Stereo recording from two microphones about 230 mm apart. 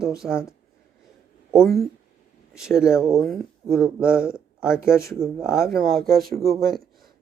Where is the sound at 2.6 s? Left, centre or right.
Centre.